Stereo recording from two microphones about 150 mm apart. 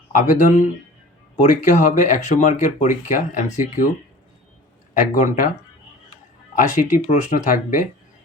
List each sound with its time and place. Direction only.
0.1 s speech: 60° left (ahead or behind)
4.9 s speech: 60° left (ahead or behind)
6.5 s speech: 60° left (ahead or behind)